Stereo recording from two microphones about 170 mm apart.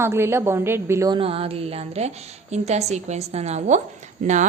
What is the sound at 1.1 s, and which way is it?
A woman's voice, 35° right (ahead or behind).